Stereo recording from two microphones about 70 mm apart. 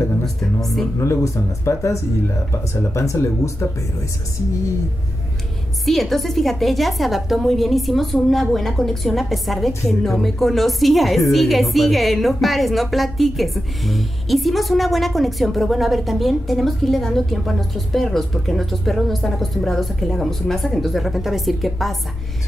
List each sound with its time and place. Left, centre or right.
0.2 s a woman's voice: centre
0.9 s speech: left
5.9 s a woman's voice: centre